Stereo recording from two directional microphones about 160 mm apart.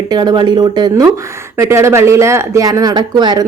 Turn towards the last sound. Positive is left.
turn(degrees=-25)  # may be behind; listen again after turning